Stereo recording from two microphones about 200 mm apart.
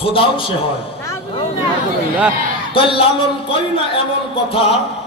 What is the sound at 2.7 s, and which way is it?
A man's voice, 25° left (ahead or behind).